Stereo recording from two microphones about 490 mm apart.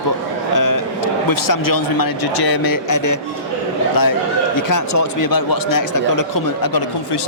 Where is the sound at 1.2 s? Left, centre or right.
Left.